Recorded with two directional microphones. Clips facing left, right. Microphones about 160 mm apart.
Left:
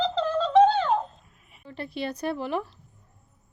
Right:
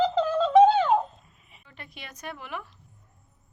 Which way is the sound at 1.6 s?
35° left (ahead or behind).